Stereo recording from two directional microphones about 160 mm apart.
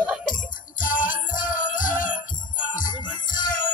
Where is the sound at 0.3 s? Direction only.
55° left (ahead or behind).